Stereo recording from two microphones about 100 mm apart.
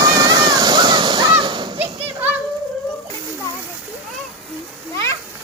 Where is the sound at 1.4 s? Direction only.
50° right (ahead or behind).